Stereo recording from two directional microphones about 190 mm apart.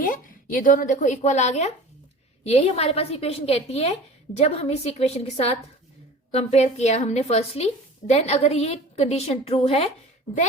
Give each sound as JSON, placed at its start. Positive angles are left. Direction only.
{"t": 0.0, "sound": "a woman's voice", "side_deg": 45}